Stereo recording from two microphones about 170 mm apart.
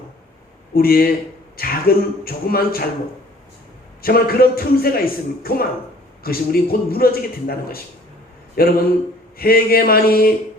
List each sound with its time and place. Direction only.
0.7 s a man's voice: 60° left (ahead or behind)
4.0 s a man's voice: 60° left (ahead or behind)